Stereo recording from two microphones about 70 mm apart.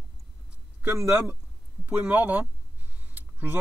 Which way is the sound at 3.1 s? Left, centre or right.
Right.